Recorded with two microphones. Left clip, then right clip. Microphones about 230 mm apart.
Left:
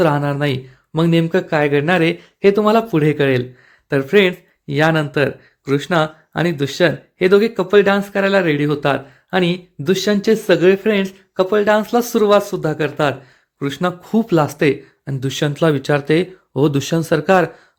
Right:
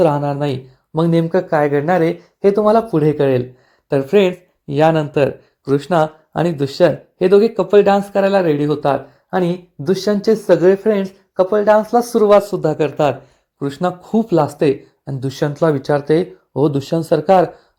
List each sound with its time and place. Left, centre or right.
0.0 s speech: centre
0.9 s speech: left
2.9 s speech: centre
9.8 s speech: left
10.6 s speech: centre
11.6 s speech: left
12.2 s speech: centre
15.3 s speech: left
16.6 s speech: centre